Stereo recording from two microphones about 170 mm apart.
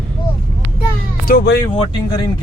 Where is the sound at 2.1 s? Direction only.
25° left (ahead or behind).